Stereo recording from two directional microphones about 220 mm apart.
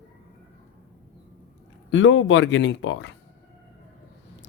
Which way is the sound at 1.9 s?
60° left (ahead or behind).